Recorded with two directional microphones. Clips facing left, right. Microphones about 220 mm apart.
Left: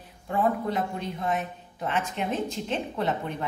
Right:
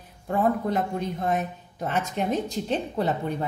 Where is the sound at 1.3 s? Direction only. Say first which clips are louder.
Right 3 dB; 40° right (ahead or behind).